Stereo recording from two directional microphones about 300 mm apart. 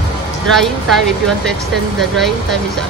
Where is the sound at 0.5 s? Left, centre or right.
Centre.